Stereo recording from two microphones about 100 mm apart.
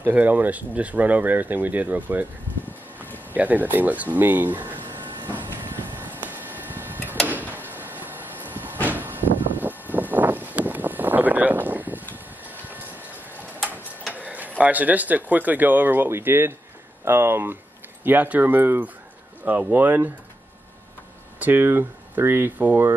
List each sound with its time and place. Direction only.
0.0 s speech: 15° right (ahead or behind)
3.3 s speech: 15° right (ahead or behind)
4.8 s train: 50° right (ahead or behind)
5.5 s printer: 20° right (ahead or behind)
7.5 s vehicle: 20° right (ahead or behind)
12.4 s train: 15° right (ahead or behind)
14.1 s tick-tock: 15° right (ahead or behind)
14.6 s speech: 15° right (ahead or behind)
21.4 s speech: 20° right (ahead or behind)